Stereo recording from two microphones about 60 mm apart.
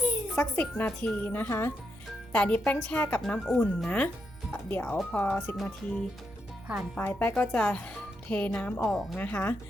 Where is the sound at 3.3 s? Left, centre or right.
Centre.